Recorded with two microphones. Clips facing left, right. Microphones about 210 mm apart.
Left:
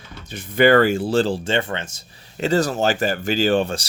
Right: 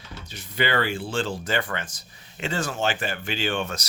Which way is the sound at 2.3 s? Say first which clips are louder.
Left 9 dB; 40° left (ahead or behind).